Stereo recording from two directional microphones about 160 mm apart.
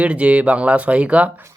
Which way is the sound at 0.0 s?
10° right (ahead or behind).